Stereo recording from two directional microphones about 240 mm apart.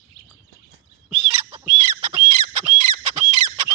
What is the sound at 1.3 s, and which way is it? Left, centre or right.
Bird, right.